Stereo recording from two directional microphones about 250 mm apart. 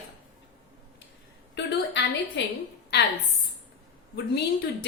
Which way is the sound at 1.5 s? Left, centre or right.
Left.